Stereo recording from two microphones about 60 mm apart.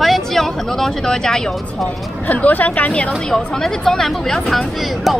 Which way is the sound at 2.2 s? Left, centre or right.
Left.